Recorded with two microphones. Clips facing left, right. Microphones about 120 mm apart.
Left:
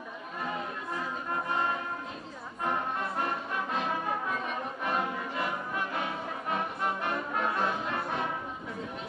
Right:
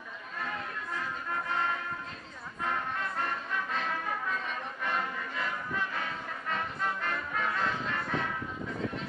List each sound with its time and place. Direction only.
0.4 s music: 20° left (ahead or behind)